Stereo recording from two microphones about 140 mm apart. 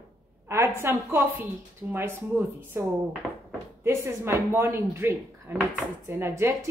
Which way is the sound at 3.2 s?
Centre (ahead or behind).